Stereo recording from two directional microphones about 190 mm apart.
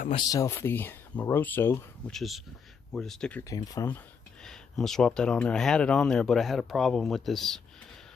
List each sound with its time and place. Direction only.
0.1 s speech: 20° left (ahead or behind)
2.1 s speech: centre (ahead or behind)
3.4 s speech: 20° left (ahead or behind)
4.5 s speech: centre (ahead or behind)